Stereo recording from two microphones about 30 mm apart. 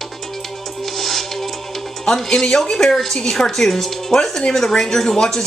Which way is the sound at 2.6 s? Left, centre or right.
Centre.